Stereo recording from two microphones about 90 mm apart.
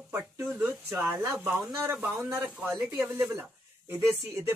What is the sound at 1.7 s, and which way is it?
Music, 30° right (ahead or behind).